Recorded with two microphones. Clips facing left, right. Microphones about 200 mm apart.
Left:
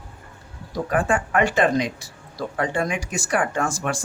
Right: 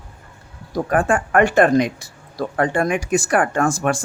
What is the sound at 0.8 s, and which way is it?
Speech, 50° right (ahead or behind).